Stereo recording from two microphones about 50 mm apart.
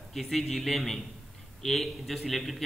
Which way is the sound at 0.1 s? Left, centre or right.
Centre.